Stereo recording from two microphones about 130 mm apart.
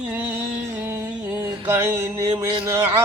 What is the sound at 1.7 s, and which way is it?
Mantra, 20° right (ahead or behind).